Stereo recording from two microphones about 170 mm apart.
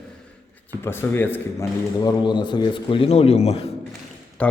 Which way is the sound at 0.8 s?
15° left (ahead or behind).